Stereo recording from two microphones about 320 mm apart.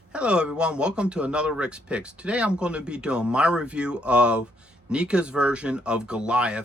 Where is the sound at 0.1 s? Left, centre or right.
Centre.